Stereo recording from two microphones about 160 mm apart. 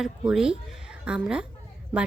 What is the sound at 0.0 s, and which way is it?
A woman's voice, 5° right (ahead or behind).